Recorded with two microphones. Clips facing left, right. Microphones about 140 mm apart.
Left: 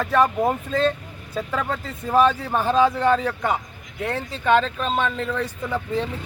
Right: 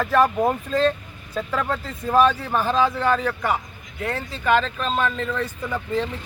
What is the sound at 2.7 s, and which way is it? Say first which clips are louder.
Speech: left 4 dB; 25° left (ahead or behind).